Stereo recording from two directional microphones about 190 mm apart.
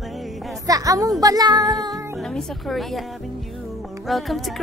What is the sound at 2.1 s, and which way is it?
Music, centre (ahead or behind).